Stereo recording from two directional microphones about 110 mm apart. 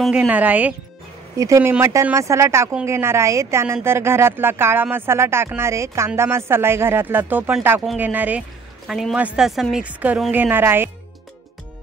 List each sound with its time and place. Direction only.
0.1 s speech: 10° right (ahead or behind)
1.3 s speech: 30° right (ahead or behind)
1.6 s speech: 20° right (ahead or behind)
8.8 s a man's voice: centre (ahead or behind)
9.2 s speech: 10° right (ahead or behind)
9.5 s a man's voice: centre (ahead or behind)
9.8 s speech: 15° right (ahead or behind)